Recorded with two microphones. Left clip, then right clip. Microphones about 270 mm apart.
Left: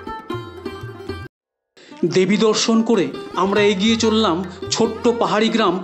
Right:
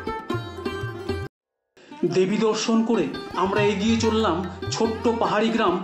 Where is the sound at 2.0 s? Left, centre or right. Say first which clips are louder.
Left 5 dB; left.